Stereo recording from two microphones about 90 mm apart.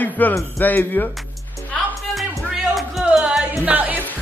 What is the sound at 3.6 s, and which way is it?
Music, 20° right (ahead or behind).